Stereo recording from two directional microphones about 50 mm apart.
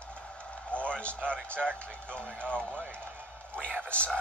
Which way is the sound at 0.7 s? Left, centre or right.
Left.